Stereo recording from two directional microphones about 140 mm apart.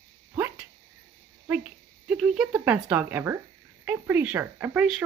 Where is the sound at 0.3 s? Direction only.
15° right (ahead or behind).